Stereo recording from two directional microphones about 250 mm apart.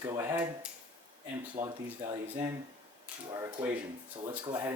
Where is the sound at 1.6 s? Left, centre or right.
Right.